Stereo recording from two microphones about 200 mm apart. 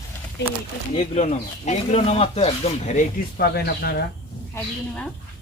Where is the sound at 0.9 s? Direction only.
35° left (ahead or behind).